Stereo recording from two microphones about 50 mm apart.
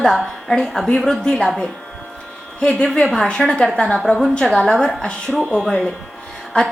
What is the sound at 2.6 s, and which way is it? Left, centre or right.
Speech, left.